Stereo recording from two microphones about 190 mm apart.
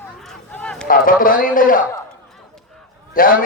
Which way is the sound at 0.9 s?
45° left (ahead or behind).